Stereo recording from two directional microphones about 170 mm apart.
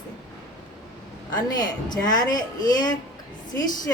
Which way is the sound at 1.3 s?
25° left (ahead or behind).